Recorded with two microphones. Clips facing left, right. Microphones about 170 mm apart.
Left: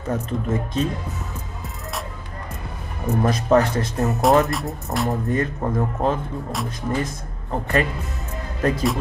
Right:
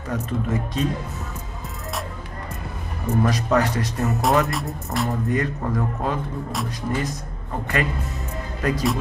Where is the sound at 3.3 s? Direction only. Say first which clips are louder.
Left 5 dB; 25° left (ahead or behind).